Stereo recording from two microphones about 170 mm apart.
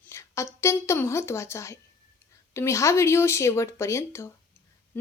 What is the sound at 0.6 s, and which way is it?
Speech, 15° left (ahead or behind).